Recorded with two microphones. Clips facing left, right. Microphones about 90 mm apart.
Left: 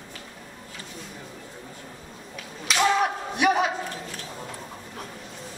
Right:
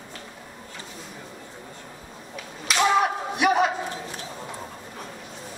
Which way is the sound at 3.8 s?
25° right (ahead or behind).